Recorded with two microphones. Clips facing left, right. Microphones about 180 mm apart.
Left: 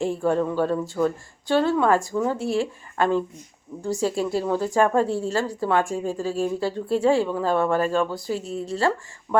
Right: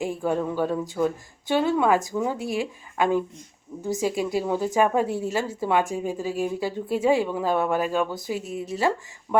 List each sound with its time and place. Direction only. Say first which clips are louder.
0.2 s a woman's voice: left 2 dB; 10° right (ahead or behind)
8.4 s speech: left 1 dB; 35° left (ahead or behind)
8.6 s speech: left 1 dB; 20° right (ahead or behind)